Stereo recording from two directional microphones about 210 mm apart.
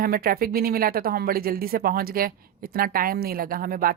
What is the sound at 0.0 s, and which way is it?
Speech, 45° right (ahead or behind).